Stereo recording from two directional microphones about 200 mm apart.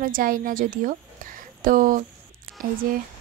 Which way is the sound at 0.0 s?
45° right (ahead or behind).